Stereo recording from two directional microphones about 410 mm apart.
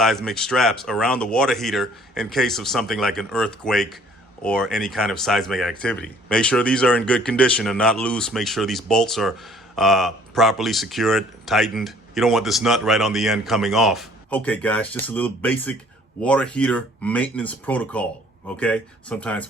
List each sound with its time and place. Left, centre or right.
0.0 s speech: centre